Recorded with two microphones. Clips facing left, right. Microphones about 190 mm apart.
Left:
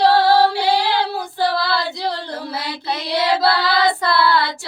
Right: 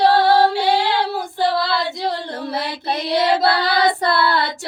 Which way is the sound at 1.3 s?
20° right (ahead or behind).